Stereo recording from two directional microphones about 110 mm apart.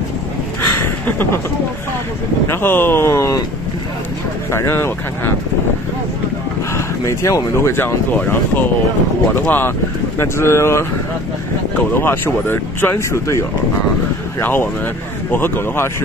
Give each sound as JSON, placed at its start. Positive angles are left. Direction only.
{"t": 0.6, "sound": "a sound", "side_deg": 20}
{"t": 2.4, "sound": "speech", "side_deg": 20}
{"t": 4.5, "sound": "speech", "side_deg": 25}
{"t": 6.7, "sound": "speech", "side_deg": 30}
{"t": 11.9, "sound": "speech", "side_deg": 20}